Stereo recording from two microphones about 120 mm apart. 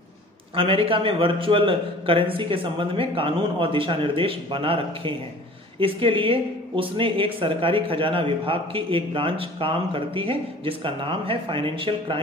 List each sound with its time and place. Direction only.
0.6 s speech: 50° right (ahead or behind)